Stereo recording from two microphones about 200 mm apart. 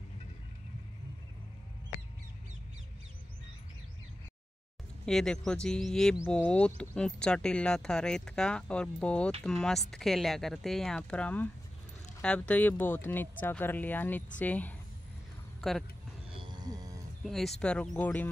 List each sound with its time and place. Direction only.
5.0 s speech: 5° left (ahead or behind)
16.3 s a sound: 20° right (ahead or behind)
17.2 s speech: centre (ahead or behind)